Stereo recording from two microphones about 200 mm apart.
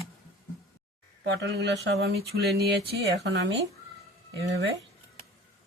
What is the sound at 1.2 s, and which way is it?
Speech, 60° right (ahead or behind).